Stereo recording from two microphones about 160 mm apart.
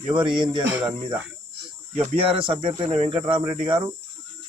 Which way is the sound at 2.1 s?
35° right (ahead or behind).